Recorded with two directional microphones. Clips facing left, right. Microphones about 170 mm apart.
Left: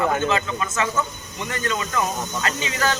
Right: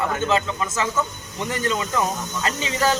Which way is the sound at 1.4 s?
25° right (ahead or behind).